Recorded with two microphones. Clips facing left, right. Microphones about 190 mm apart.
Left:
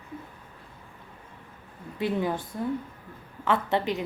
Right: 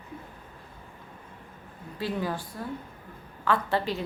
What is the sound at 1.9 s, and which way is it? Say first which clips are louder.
A woman's voice: left 3 dB; 20° left (ahead or behind).